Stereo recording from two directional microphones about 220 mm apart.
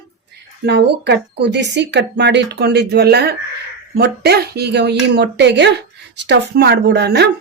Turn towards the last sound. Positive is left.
turn(degrees=-50)  # may be behind; listen again after turning